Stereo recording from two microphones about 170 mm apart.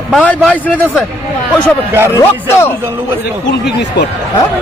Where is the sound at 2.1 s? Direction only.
15° left (ahead or behind).